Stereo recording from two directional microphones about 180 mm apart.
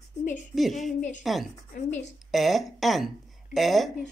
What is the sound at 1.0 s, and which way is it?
A woman's voice, 45° left (ahead or behind).